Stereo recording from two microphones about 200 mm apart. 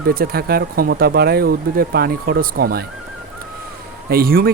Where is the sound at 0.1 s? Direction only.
50° right (ahead or behind).